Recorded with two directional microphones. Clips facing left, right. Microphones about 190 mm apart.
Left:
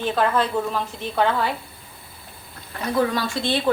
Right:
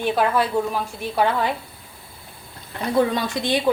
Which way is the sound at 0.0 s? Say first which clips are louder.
Right 1 dB; 10° right (ahead or behind).